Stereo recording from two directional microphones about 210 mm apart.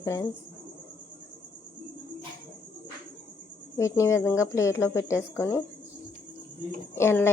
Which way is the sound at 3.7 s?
15° left (ahead or behind).